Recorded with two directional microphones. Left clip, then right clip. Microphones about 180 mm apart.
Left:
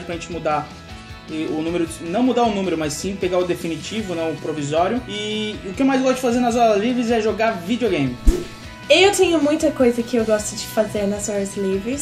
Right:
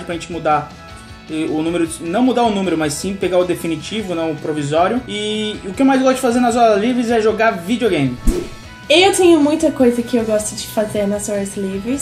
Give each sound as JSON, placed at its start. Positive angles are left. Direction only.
{"t": 0.1, "sound": "speech", "side_deg": -5}
{"t": 8.8, "sound": "a woman's voice", "side_deg": 20}